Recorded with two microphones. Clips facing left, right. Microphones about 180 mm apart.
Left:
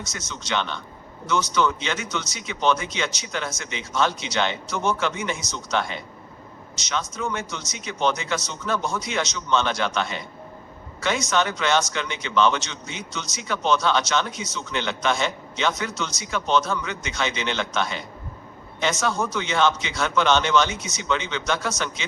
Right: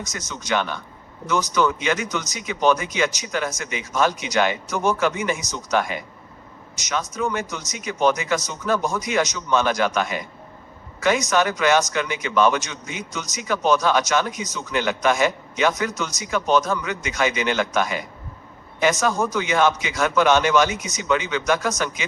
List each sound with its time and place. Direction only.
0.0 s speech: 15° right (ahead or behind)